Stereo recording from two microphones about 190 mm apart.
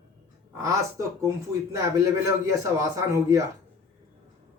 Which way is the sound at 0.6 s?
15° right (ahead or behind).